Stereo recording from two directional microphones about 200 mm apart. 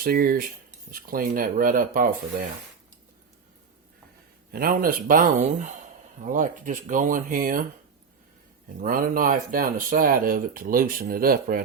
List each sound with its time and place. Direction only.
0.0 s speech: 45° right (ahead or behind)
4.5 s speech: 45° right (ahead or behind)
8.8 s speech: 45° right (ahead or behind)